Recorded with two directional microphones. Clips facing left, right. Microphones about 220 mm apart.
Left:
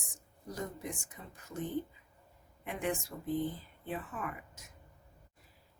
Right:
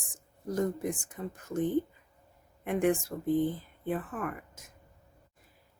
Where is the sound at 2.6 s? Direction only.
50° right (ahead or behind).